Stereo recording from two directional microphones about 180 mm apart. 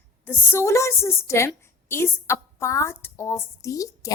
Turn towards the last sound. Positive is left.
turn(degrees=20)  # may be behind; listen again after turning